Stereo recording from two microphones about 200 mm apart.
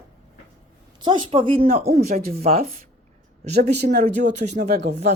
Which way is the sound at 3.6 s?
55° right (ahead or behind).